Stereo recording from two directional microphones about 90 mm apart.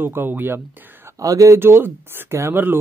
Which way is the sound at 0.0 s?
25° right (ahead or behind).